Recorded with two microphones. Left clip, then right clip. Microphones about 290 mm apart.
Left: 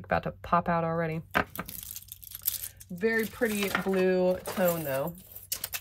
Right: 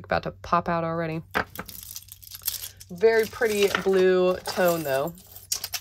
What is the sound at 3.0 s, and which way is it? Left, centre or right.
Speech, right.